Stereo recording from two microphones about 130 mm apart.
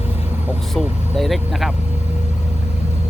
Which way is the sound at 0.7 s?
Centre (ahead or behind).